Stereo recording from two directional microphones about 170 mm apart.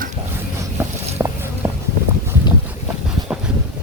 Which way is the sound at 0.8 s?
15° right (ahead or behind).